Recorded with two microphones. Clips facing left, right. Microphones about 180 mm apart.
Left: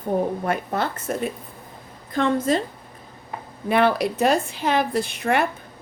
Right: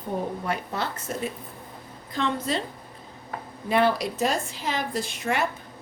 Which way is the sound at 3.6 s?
60° left (ahead or behind).